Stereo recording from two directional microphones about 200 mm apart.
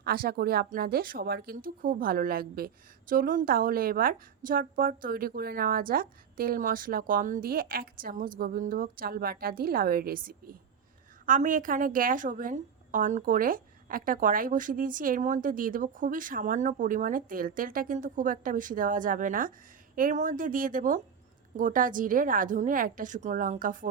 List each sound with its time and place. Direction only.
0.0 s a woman's voice: 50° right (ahead or behind)